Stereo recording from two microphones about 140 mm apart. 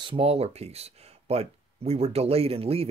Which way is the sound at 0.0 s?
40° right (ahead or behind).